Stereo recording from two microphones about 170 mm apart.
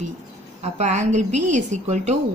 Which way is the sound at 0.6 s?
45° right (ahead or behind).